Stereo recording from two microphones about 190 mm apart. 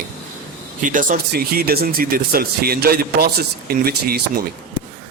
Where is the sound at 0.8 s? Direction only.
45° right (ahead or behind).